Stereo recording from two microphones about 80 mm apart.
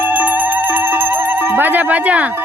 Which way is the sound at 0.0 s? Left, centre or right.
Right.